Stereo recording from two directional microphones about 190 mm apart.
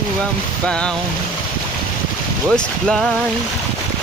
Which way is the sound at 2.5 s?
5° left (ahead or behind).